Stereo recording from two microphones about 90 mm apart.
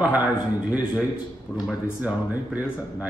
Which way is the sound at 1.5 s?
20° left (ahead or behind).